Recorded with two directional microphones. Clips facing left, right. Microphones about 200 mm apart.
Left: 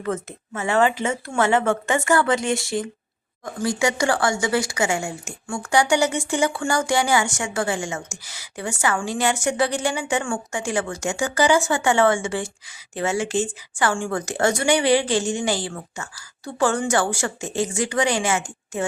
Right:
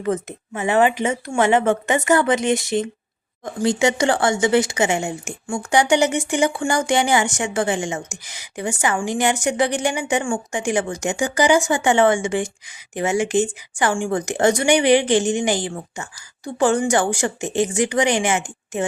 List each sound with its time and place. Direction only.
0.0 s speech: 20° right (ahead or behind)